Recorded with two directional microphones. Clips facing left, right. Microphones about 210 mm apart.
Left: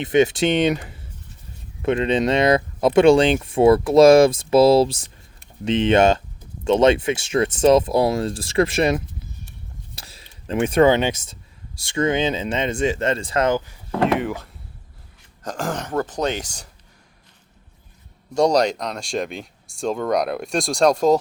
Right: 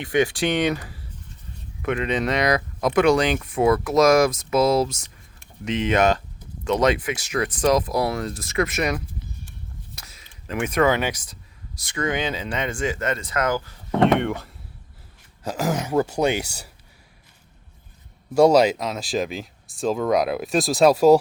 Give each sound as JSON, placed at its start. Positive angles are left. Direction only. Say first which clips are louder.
{"t": 0.0, "sound": "speech", "louder": "left 4 dB", "side_deg": 20}
{"t": 9.9, "sound": "a sound", "louder": "left 2 dB", "side_deg": 30}
{"t": 11.8, "sound": "speech", "louder": "left 5 dB", "side_deg": 25}
{"t": 14.0, "sound": "speech", "louder": "right 1 dB", "side_deg": 0}
{"t": 18.3, "sound": "speech", "louder": "right 2 dB", "side_deg": -5}